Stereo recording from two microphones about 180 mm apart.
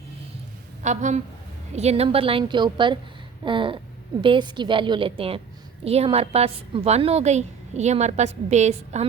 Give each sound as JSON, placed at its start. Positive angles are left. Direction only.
{"t": 0.8, "sound": "a woman's voice", "side_deg": -40}